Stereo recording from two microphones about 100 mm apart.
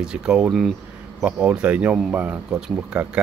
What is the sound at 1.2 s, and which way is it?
Speech, 10° right (ahead or behind).